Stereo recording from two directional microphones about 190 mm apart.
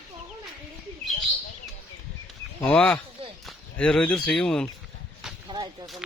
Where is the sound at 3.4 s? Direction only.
5° left (ahead or behind).